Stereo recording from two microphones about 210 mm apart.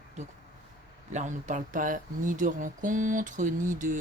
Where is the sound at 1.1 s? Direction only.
35° right (ahead or behind).